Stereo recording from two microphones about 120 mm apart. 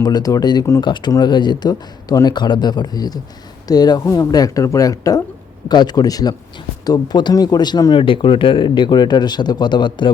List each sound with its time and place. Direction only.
0.0 s speech: 30° left (ahead or behind)